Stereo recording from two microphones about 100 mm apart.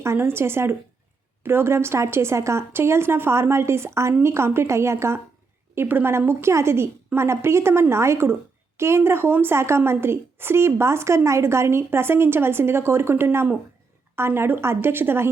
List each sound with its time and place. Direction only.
0.0 s a woman's voice: 25° right (ahead or behind)